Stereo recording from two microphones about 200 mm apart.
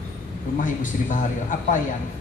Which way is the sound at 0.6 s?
40° left (ahead or behind).